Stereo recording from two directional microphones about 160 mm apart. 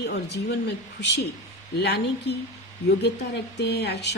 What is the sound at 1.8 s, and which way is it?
Speech, 90° left.